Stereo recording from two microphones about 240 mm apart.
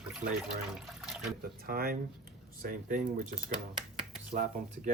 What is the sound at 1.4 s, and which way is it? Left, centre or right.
Speech, right.